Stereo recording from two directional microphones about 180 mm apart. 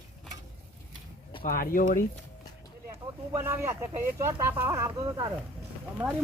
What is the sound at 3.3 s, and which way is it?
Speech, 15° right (ahead or behind).